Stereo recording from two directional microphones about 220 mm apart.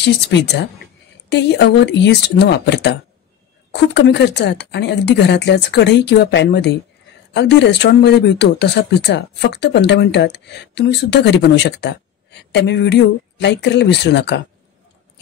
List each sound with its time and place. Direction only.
0.0 s speech: 50° left (ahead or behind)